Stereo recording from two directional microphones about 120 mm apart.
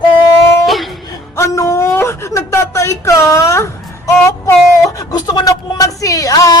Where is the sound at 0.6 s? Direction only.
Centre (ahead or behind).